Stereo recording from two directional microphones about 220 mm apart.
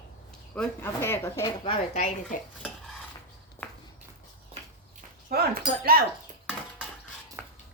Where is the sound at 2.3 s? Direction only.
40° left (ahead or behind).